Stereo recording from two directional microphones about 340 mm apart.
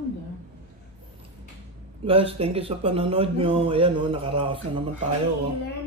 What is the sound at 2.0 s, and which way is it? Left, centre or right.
Speech, centre.